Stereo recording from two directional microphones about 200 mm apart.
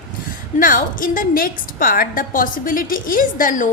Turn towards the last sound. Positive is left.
turn(degrees=45)  # may be behind; listen again after turning